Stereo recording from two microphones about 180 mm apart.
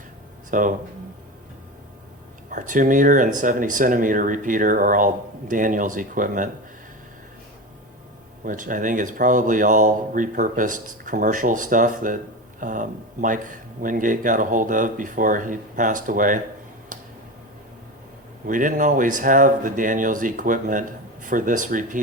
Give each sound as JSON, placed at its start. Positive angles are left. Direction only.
{"t": 0.5, "sound": "speech", "side_deg": -45}
{"t": 2.5, "sound": "speech", "side_deg": -45}
{"t": 8.4, "sound": "speech", "side_deg": -45}
{"t": 18.4, "sound": "speech", "side_deg": -45}